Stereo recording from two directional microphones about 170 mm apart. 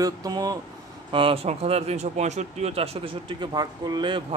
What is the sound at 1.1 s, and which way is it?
Speech, 30° right (ahead or behind).